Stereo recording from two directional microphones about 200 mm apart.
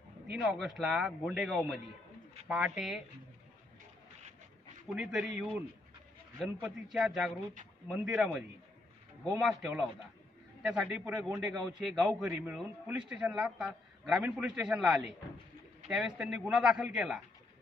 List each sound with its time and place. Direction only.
0.4 s a man's voice: centre (ahead or behind)
4.8 s a man's voice: centre (ahead or behind)